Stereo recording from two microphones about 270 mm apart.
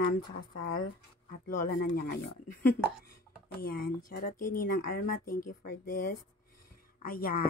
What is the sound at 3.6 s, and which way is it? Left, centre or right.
Speech, left.